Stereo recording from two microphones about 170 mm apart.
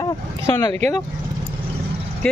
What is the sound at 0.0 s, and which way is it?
Speech, 20° left (ahead or behind).